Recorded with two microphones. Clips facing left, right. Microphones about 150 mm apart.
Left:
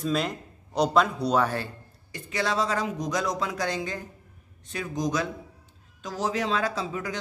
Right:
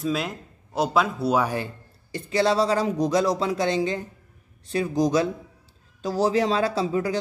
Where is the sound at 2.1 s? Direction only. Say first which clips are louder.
Right 7 dB; 30° right (ahead or behind).